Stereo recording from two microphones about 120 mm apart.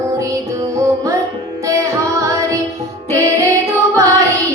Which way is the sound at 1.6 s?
25° right (ahead or behind).